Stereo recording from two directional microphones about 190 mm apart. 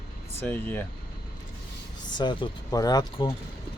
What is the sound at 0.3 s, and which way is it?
Speech, 10° left (ahead or behind).